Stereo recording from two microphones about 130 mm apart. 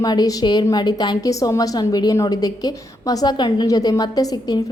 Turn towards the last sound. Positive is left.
turn(degrees=30)  # may be behind; listen again after turning